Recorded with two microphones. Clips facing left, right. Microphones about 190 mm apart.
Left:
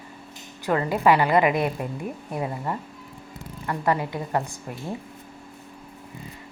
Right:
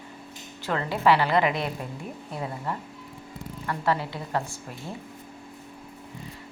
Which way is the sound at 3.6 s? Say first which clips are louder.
Left 2 dB; 10° left (ahead or behind).